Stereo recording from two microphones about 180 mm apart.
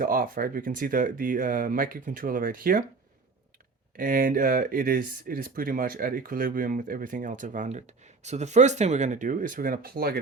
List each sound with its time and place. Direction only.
0.0 s speech: 50° right (ahead or behind)
3.9 s speech: 50° right (ahead or behind)